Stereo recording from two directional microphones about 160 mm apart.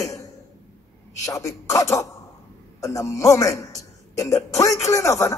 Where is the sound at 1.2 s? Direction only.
20° left (ahead or behind).